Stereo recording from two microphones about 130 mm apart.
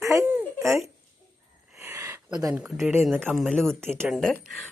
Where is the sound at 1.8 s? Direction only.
20° right (ahead or behind).